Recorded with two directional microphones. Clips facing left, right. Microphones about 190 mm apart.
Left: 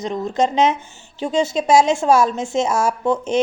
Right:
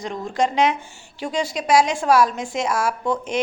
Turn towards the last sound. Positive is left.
turn(degrees=25)  # may be behind; listen again after turning